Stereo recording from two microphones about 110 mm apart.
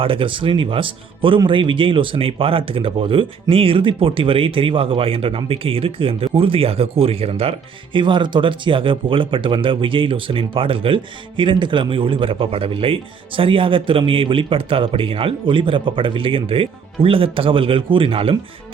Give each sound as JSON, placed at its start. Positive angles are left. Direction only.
{"t": 0.0, "sound": "speech", "side_deg": -55}
{"t": 7.9, "sound": "speech", "side_deg": -45}